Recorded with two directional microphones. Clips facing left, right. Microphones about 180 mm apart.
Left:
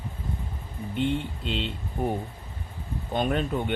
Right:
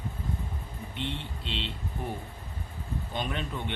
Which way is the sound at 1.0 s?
45° left (ahead or behind).